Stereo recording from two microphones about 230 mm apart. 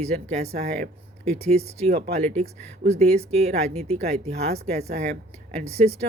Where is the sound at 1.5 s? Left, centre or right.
Right.